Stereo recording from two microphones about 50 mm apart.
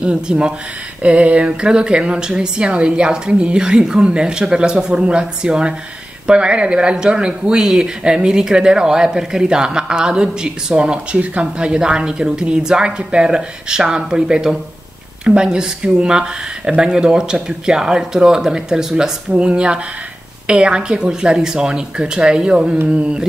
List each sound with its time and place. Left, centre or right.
0.0 s a man's voice: centre